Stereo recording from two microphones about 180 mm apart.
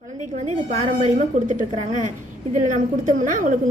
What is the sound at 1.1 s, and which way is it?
A woman's voice, 40° right (ahead or behind).